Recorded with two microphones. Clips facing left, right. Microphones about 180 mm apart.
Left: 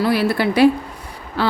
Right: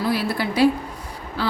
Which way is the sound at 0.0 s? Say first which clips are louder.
Left 5 dB; 65° left (ahead or behind).